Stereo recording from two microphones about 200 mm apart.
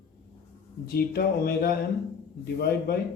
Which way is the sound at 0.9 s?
50° left (ahead or behind).